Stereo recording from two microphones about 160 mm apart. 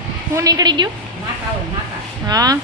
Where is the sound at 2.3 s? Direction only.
25° right (ahead or behind).